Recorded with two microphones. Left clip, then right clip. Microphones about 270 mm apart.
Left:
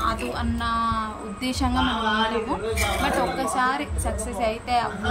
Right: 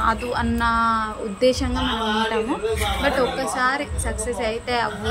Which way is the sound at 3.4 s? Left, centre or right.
Centre.